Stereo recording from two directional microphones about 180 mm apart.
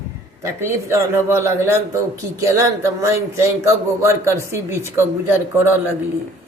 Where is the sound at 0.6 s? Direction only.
15° right (ahead or behind).